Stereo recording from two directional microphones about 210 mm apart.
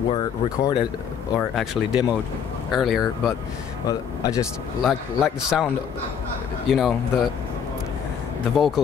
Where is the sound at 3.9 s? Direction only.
15° left (ahead or behind).